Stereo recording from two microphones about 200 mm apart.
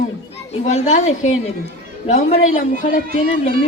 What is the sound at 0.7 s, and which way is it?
A child's voice, 35° left (ahead or behind).